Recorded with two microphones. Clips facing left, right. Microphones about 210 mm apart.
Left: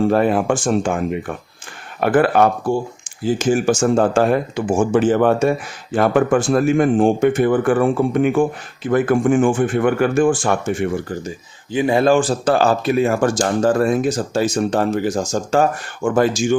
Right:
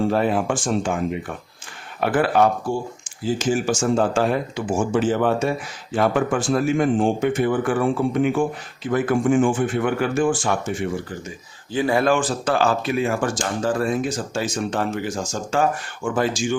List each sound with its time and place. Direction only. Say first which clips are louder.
0.1 s speech: left 4 dB; 55° left (ahead or behind)
11.7 s speech: left 4 dB; 20° left (ahead or behind); by 16.6 s 45° left (ahead or behind)